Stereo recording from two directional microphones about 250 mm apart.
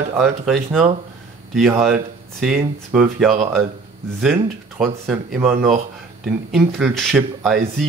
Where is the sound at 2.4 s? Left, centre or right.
Centre.